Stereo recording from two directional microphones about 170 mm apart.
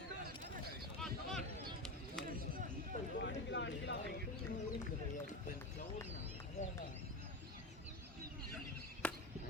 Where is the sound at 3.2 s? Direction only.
90° left.